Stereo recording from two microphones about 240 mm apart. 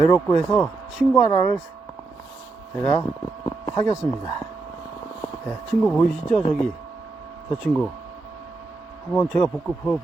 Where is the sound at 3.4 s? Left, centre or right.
Centre.